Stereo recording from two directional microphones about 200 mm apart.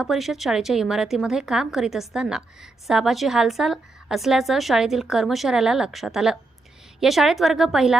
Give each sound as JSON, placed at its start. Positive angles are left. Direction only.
{"t": 0.0, "sound": "a woman's voice", "side_deg": 0}